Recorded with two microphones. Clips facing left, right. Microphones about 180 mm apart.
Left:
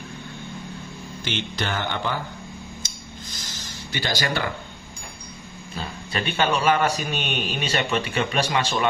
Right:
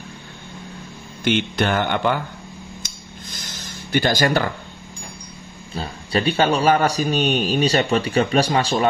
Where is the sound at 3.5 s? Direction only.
50° right (ahead or behind).